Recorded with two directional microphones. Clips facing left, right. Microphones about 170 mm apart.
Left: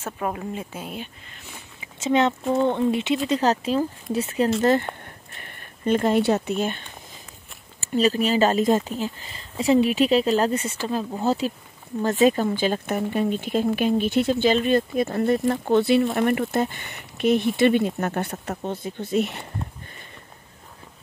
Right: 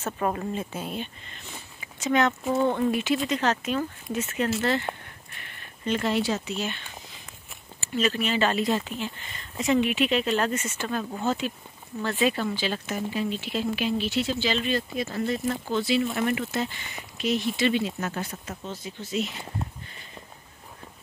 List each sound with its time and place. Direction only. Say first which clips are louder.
0.0 s speech: right 1 dB; 5° left (ahead or behind)
2.0 s speech: left 3 dB; 25° left (ahead or behind)
4.6 s speech: left 8 dB; 45° left (ahead or behind)
5.9 s speech: left 6 dB; 50° left (ahead or behind)
7.8 s speech: left 5 dB; 40° left (ahead or behind); by 19.4 s 60° left (ahead or behind)